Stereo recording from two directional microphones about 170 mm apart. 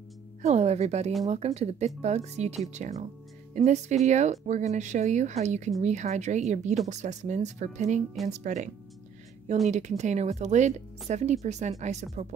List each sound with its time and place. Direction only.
0.4 s speech: 40° right (ahead or behind)
9.7 s speech: 45° right (ahead or behind)